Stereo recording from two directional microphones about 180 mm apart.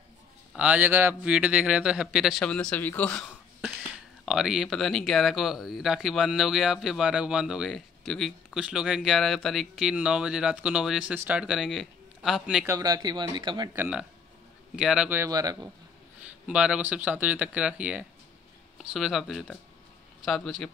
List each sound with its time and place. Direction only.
0.6 s speech: 10° right (ahead or behind); by 3.3 s 10° left (ahead or behind)
4.3 s speech: centre (ahead or behind)
12.6 s speech: 20° right (ahead or behind)
13.7 s speech: 5° right (ahead or behind)
16.4 s speech: 5° right (ahead or behind)